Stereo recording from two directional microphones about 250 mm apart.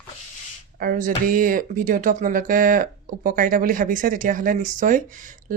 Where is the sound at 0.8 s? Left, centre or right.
Right.